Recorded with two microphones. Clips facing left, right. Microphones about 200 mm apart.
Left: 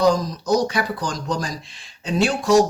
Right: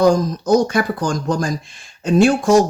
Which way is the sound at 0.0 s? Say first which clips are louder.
Right 4 dB; 50° right (ahead or behind).